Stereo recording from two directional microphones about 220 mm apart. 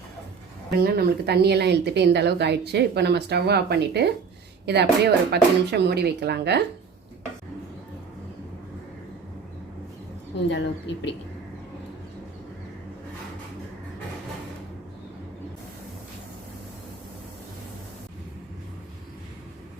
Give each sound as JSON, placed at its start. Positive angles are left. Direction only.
{"t": 0.8, "sound": "a woman's voice", "side_deg": -45}
{"t": 10.5, "sound": "a woman's voice", "side_deg": 55}